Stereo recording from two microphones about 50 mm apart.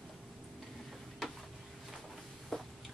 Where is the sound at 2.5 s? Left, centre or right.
Centre.